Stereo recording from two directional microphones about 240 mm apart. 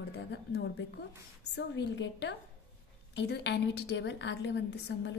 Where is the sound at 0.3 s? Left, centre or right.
Left.